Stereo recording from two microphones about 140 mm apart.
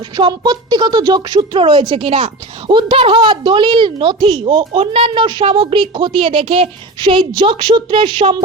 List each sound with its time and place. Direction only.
0.2 s a woman's voice: 30° right (ahead or behind)